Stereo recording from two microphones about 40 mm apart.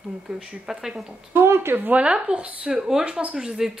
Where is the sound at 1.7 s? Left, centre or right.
Right.